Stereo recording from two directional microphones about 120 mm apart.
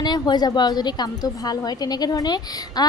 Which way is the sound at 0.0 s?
35° left (ahead or behind).